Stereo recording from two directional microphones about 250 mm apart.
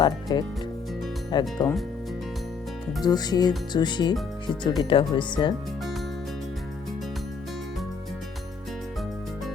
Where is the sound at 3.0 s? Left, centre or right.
Centre.